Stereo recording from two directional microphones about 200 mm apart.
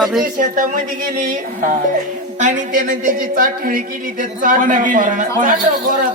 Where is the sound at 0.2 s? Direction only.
40° right (ahead or behind).